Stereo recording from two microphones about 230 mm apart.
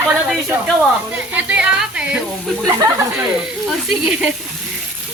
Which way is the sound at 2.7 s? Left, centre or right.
Centre.